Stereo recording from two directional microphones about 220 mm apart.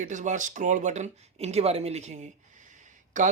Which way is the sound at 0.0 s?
35° right (ahead or behind).